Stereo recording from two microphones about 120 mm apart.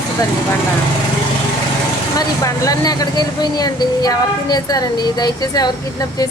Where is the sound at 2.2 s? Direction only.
30° left (ahead or behind).